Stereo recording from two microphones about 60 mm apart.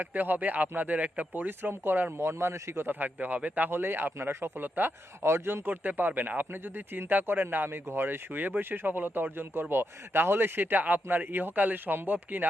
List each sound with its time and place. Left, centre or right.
0.0 s speech: right
2.1 s speech: right
4.8 s speech: right
5.2 s a man's voice: right
5.6 s speech: right